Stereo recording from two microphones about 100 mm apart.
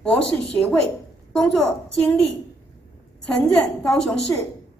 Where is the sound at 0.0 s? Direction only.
15° left (ahead or behind).